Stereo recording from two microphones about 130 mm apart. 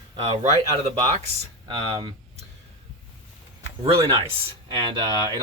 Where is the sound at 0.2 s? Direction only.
55° right (ahead or behind).